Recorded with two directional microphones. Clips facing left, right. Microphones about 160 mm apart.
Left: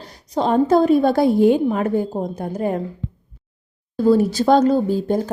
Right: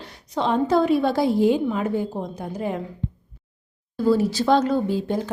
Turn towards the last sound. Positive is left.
turn(degrees=45)  # may be behind; listen again after turning